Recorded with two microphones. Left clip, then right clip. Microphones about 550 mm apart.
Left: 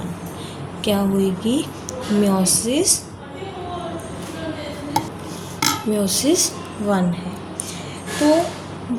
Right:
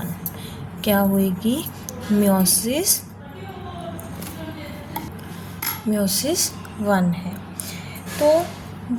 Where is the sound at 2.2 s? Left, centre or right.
Right.